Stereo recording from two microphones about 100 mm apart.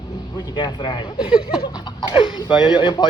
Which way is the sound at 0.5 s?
50° left (ahead or behind).